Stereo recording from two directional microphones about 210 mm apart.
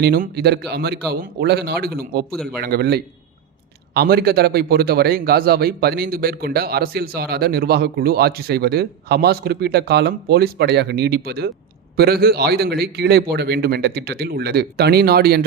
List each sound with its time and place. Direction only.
0.0 s a man's voice: 50° right (ahead or behind)
2.3 s a man's voice: centre (ahead or behind)
2.6 s a man's voice: 50° right (ahead or behind)